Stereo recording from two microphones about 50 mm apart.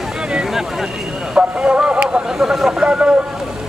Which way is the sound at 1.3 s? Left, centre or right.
Centre.